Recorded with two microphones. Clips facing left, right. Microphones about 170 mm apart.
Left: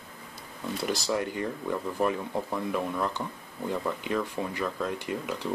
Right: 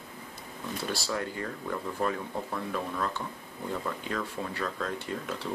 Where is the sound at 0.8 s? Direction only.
15° left (ahead or behind).